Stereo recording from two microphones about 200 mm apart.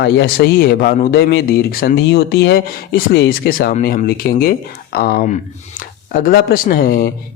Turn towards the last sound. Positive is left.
turn(degrees=45)  # may be behind; listen again after turning